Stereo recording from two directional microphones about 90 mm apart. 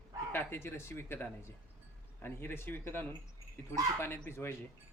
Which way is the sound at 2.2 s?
25° left (ahead or behind).